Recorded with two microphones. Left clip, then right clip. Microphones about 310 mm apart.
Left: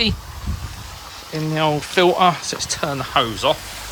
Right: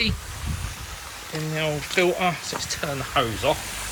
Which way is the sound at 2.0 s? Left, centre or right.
Centre.